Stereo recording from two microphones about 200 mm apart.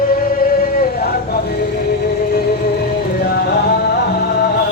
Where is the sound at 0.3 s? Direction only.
50° left (ahead or behind).